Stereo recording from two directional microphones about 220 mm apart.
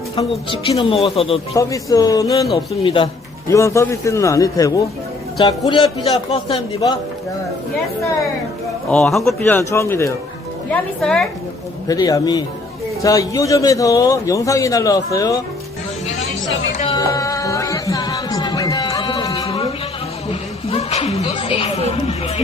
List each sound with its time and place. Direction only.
0.2 s a man's voice: 25° left (ahead or behind)
1.5 s a man's voice: 15° left (ahead or behind)
8.9 s a man's voice: centre (ahead or behind)
11.9 s a man's voice: 15° left (ahead or behind)
16.9 s music: 15° left (ahead or behind)